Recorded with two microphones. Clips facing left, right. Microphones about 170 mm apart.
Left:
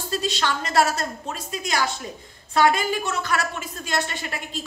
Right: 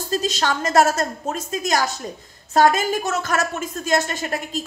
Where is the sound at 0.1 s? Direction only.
40° right (ahead or behind).